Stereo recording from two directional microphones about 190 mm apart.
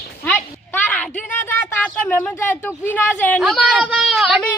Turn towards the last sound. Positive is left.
turn(degrees=0)  # may be behind; listen again after turning